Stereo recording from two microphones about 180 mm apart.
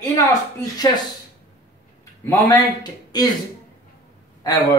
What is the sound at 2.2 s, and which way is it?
Speech, 20° left (ahead or behind).